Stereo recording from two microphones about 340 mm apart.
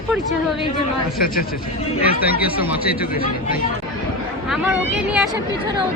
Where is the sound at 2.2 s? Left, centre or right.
Left.